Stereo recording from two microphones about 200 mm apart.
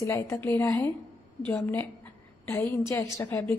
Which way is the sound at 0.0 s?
15° left (ahead or behind).